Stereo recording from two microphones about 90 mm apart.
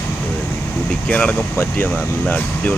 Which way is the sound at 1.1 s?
15° left (ahead or behind).